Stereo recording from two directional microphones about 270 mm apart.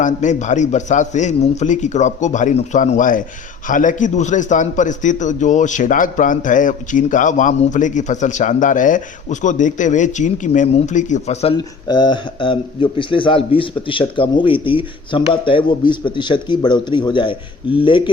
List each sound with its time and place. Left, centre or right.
0.0 s a man's voice: left